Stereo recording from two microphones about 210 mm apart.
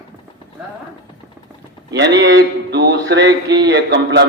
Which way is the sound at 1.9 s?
60° right (ahead or behind).